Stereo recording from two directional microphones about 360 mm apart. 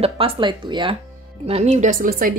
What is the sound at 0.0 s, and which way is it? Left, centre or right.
Speech, centre.